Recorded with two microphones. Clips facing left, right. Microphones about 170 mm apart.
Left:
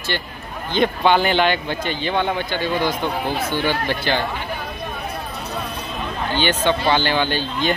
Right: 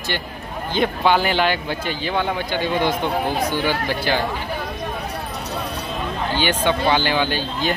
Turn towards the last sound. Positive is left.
turn(degrees=-10)  # may be behind; listen again after turning